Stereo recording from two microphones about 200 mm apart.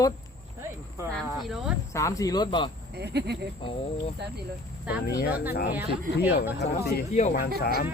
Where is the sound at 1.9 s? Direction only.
15° left (ahead or behind).